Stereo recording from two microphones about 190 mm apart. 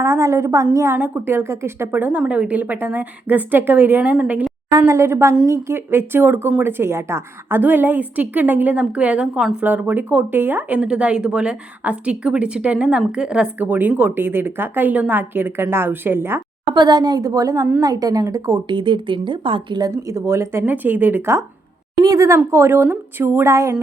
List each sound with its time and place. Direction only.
0.0 s speech: 15° right (ahead or behind)
16.7 s speech: 20° right (ahead or behind)